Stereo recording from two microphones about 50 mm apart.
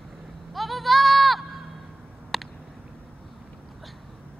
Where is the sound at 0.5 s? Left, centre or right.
Centre.